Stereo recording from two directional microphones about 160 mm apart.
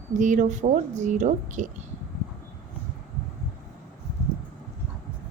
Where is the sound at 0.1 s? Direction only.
50° right (ahead or behind).